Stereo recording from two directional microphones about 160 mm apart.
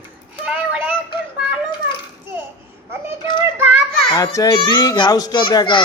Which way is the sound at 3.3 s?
10° right (ahead or behind).